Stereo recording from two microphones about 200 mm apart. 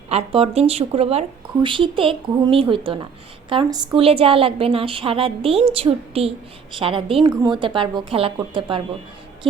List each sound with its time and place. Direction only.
0.1 s a woman's voice: 30° right (ahead or behind)